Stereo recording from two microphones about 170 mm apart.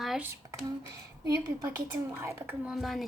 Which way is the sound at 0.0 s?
Centre (ahead or behind).